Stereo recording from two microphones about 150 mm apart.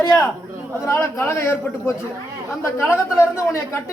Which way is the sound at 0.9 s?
15° left (ahead or behind).